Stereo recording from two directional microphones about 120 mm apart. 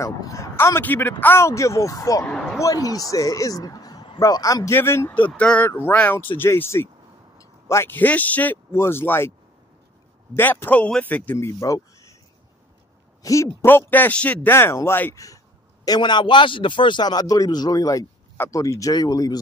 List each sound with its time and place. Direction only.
0.0 s speech: 25° left (ahead or behind)
2.2 s speech: 5° left (ahead or behind)
2.6 s a man's voice: 30° left (ahead or behind)
4.7 s speech: 20° left (ahead or behind)
10.3 s speech: 15° left (ahead or behind)
11.3 s speech: 25° left (ahead or behind)
13.2 s speech: 25° left (ahead or behind)
15.2 s a man's voice: 30° left (ahead or behind)